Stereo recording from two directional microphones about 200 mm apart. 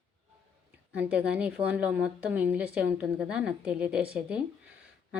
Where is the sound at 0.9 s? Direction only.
5° right (ahead or behind).